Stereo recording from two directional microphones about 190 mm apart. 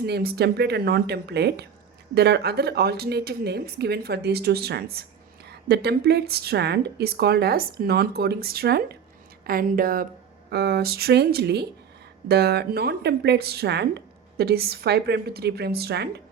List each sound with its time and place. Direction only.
0.0 s speech: 55° right (ahead or behind)